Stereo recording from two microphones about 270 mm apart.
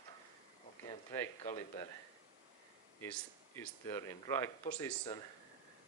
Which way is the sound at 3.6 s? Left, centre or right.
Centre.